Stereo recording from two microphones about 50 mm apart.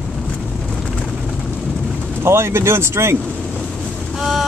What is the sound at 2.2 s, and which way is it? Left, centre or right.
Speech, right.